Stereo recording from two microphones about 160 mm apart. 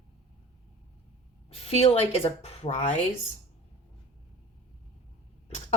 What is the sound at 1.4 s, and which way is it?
A woman's voice, 40° left (ahead or behind).